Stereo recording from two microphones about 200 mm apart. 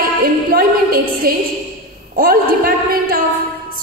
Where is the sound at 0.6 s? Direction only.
45° right (ahead or behind).